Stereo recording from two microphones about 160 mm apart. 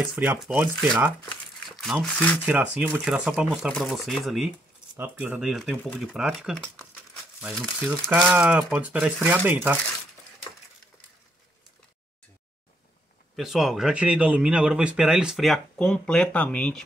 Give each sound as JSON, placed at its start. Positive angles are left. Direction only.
{"t": 0.0, "sound": "speech", "side_deg": -10}
{"t": 1.8, "sound": "speech", "side_deg": 5}
{"t": 2.4, "sound": "speech", "side_deg": -10}
{"t": 4.9, "sound": "speech", "side_deg": -10}
{"t": 8.1, "sound": "speech", "side_deg": -10}
{"t": 13.4, "sound": "speech", "side_deg": 0}